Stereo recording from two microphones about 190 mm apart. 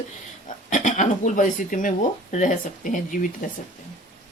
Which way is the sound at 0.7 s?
40° left (ahead or behind).